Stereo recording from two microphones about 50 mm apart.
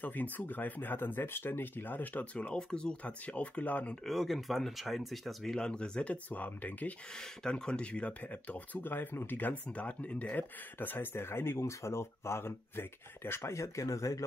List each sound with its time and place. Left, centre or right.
0.0 s speech: left
2.3 s speech: left
4.0 s speech: centre
5.7 s speech: centre
6.3 s speech: left
7.2 s speech: centre; by 9.5 s left
9.5 s speech: left
13.4 s speech: left